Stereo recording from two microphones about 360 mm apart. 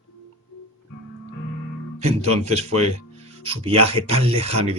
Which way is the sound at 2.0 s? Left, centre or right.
Centre.